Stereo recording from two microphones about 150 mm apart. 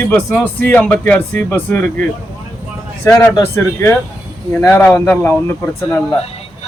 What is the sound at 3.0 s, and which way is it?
Speech, 20° left (ahead or behind).